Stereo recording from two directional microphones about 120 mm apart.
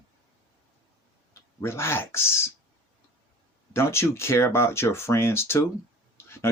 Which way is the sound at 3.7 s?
20° left (ahead or behind).